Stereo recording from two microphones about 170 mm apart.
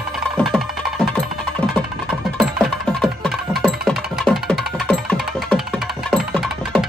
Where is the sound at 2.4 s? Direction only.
Centre (ahead or behind).